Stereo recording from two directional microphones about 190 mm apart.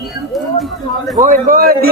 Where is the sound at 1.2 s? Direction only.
45° right (ahead or behind).